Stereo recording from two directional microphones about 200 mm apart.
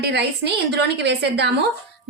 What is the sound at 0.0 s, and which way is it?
A woman's voice, 55° right (ahead or behind).